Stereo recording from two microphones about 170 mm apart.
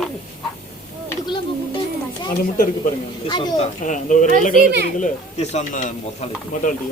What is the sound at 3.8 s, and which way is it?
Speech, 45° left (ahead or behind).